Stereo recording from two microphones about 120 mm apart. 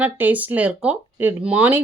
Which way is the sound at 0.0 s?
15° right (ahead or behind).